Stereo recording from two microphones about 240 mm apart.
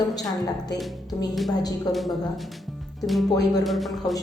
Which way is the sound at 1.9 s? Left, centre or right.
Centre.